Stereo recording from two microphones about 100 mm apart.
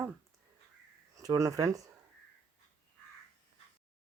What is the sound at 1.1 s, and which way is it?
Speech, 35° right (ahead or behind).